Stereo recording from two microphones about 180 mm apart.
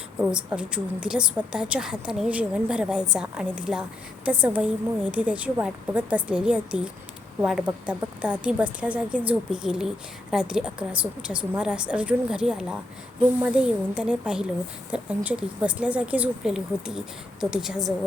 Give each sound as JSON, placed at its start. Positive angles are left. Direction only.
{"t": 0.2, "sound": "a woman's voice", "side_deg": -5}